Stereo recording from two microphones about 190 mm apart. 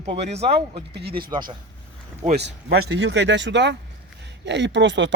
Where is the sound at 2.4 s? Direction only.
60° right (ahead or behind).